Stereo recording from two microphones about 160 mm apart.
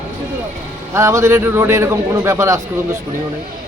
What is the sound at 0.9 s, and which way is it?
A man's voice, 20° right (ahead or behind).